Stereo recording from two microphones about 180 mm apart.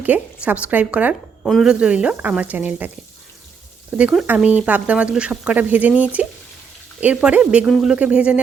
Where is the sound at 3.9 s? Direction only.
5° right (ahead or behind).